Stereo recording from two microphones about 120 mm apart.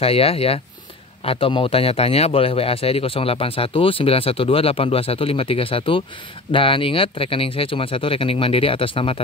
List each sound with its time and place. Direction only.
0.0 s a man's voice: 55° left (ahead or behind)